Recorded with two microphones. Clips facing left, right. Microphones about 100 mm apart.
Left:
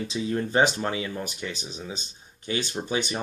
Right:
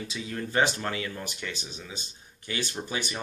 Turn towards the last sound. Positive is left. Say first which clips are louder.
# left 5 dB
turn(degrees=20)  # may be behind; listen again after turning